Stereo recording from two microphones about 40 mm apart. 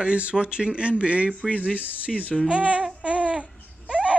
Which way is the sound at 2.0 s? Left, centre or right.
Left.